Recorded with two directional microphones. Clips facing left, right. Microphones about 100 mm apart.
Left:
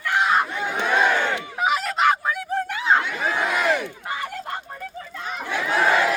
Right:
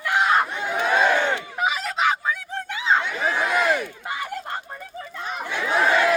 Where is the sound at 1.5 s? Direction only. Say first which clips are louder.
Left 2 dB; centre (ahead or behind).